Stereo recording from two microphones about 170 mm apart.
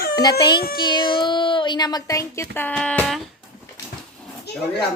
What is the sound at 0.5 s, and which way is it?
Child singing, 60° left (ahead or behind).